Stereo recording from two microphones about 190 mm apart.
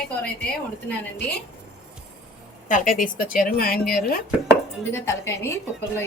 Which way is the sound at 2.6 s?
45° left (ahead or behind).